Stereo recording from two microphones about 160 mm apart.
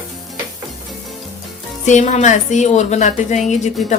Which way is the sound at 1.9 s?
50° left (ahead or behind).